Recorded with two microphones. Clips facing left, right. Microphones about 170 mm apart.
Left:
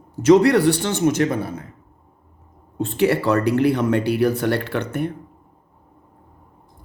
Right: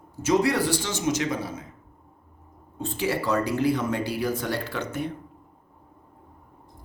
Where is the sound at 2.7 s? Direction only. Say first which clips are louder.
Left 8 dB; 65° left (ahead or behind).